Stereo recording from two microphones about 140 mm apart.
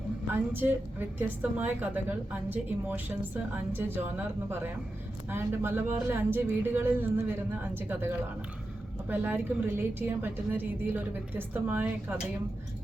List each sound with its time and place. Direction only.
0.3 s a woman's voice: 15° right (ahead or behind)